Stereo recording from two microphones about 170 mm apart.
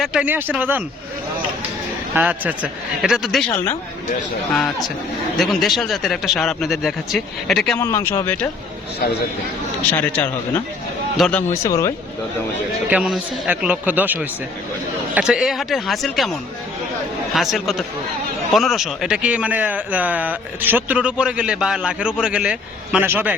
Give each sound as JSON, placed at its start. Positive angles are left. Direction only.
{"t": 0.0, "sound": "speech", "side_deg": -5}
{"t": 2.1, "sound": "speech", "side_deg": -10}
{"t": 5.4, "sound": "speech", "side_deg": 0}
{"t": 7.8, "sound": "speech", "side_deg": 15}
{"t": 9.9, "sound": "speech", "side_deg": 10}
{"t": 12.9, "sound": "speech", "side_deg": -5}